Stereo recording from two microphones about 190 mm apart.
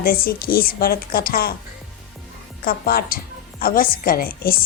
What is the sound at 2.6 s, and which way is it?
A woman's voice, 50° left (ahead or behind).